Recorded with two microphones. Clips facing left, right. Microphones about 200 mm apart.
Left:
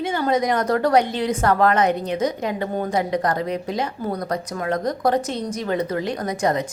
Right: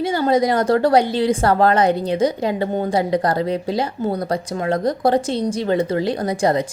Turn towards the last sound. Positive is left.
turn(degrees=-30)  # may be behind; listen again after turning